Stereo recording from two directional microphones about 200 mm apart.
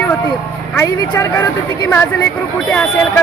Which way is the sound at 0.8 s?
10° left (ahead or behind).